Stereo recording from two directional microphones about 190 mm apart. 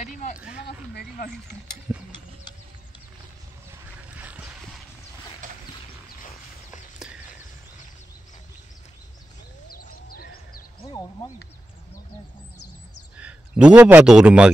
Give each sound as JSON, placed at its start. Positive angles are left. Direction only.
{"t": 0.6, "sound": "speech", "side_deg": 60}
{"t": 1.9, "sound": "ratchet", "side_deg": -10}
{"t": 4.1, "sound": "dog", "side_deg": -5}
{"t": 9.7, "sound": "a sound", "side_deg": 50}
{"t": 10.8, "sound": "a sound", "side_deg": 20}
{"t": 13.2, "sound": "a man's voice", "side_deg": -5}